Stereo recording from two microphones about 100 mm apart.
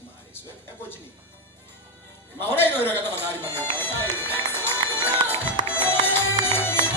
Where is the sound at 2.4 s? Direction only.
20° left (ahead or behind).